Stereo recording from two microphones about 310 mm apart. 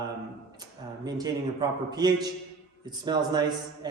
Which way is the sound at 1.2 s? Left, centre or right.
Centre.